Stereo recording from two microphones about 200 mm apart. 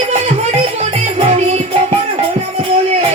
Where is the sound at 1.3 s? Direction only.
30° right (ahead or behind).